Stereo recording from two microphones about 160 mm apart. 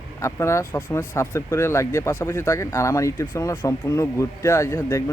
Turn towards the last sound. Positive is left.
turn(degrees=15)  # may be behind; listen again after turning